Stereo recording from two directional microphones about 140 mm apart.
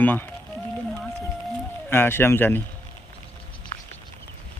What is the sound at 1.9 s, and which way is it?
Speech, 15° left (ahead or behind).